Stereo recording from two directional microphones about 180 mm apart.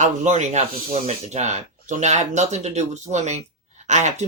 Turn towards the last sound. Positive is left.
turn(degrees=-40)  # may be behind; listen again after turning